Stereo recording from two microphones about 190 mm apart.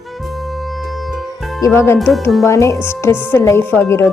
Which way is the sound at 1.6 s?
15° left (ahead or behind).